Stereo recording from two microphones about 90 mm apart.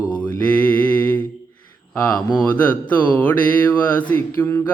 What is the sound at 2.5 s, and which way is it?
Mantra, 20° left (ahead or behind).